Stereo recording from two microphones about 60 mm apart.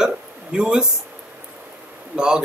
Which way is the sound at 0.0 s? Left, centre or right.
Centre.